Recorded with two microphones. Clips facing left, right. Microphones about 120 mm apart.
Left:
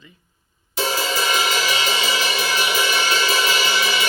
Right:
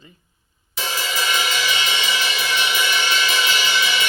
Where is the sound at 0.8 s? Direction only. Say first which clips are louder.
Left 4 dB; 35° left (ahead or behind).